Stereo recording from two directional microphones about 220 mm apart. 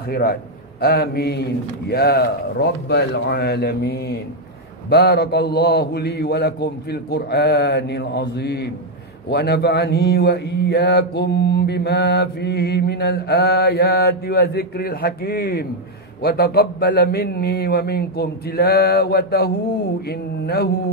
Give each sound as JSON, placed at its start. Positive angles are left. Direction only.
{"t": 0.1, "sound": "a man's voice", "side_deg": 45}